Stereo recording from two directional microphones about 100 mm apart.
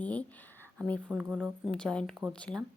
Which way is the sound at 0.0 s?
15° left (ahead or behind).